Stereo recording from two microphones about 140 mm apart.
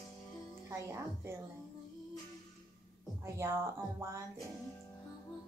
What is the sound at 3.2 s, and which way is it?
Speech, 20° right (ahead or behind).